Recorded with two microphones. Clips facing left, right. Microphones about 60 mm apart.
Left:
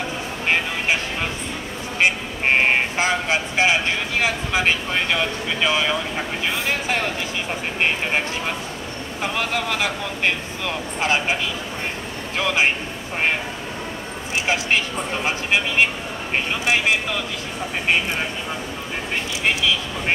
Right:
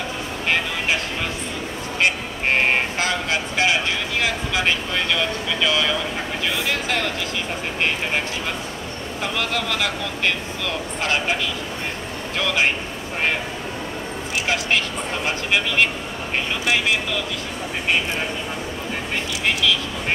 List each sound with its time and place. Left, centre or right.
2.0 s vehicle: centre
6.4 s speech: left
9.2 s speech: left
12.4 s speech: centre
15.2 s speech: centre